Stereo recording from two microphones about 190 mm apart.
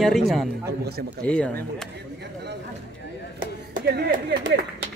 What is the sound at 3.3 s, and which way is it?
Clapping, 55° right (ahead or behind).